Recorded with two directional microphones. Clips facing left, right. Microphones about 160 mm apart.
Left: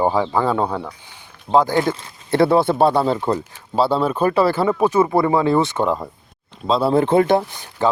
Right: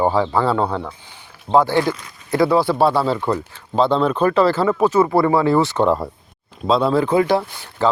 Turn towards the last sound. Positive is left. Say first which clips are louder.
# left 1 dB
turn(degrees=15)  # may be behind; listen again after turning